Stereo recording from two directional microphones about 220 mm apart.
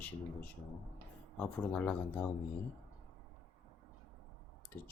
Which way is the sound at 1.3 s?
5° left (ahead or behind).